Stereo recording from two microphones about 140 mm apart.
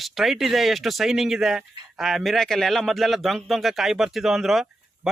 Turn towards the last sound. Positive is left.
turn(degrees=0)  # may be behind; listen again after turning